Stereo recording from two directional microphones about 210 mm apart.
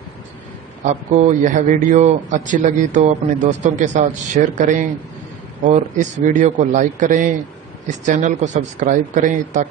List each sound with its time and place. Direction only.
1.1 s a man's voice: 35° right (ahead or behind)